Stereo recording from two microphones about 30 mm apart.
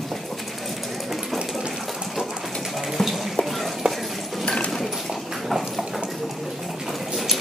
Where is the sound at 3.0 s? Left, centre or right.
Centre.